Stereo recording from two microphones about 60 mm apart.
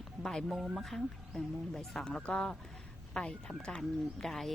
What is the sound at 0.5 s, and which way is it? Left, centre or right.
Speech, centre.